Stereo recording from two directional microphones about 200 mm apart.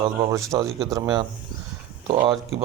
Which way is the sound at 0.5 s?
20° right (ahead or behind).